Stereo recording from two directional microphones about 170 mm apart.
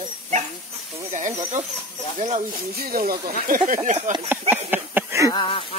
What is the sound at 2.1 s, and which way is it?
Speech, 45° right (ahead or behind).